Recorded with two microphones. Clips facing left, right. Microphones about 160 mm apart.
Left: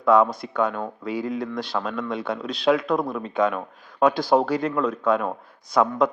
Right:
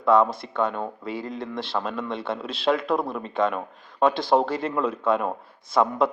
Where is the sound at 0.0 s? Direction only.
Centre (ahead or behind).